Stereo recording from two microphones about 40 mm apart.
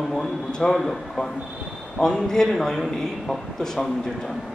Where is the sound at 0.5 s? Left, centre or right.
Centre.